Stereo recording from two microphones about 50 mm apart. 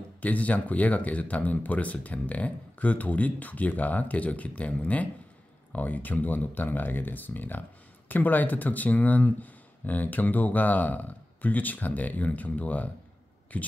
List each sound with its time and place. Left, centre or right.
0.2 s speech: left